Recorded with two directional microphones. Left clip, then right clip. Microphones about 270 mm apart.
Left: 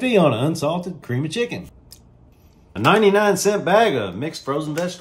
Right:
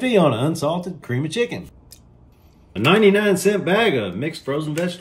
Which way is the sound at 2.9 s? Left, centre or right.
Centre.